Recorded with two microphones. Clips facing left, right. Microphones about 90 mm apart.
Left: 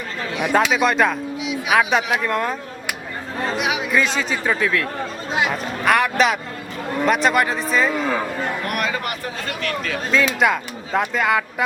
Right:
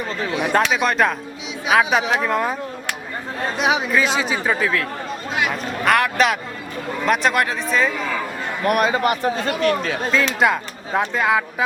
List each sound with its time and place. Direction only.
0.5 s a man's voice: centre (ahead or behind)
3.6 s a sound: 30° right (ahead or behind)
3.9 s a man's voice: 5° right (ahead or behind)
5.3 s speech: 25° left (ahead or behind)
5.8 s a man's voice: centre (ahead or behind)
8.6 s speech: 25° right (ahead or behind)
10.1 s a man's voice: centre (ahead or behind)